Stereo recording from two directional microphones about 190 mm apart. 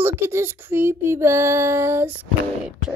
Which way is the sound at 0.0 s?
10° right (ahead or behind).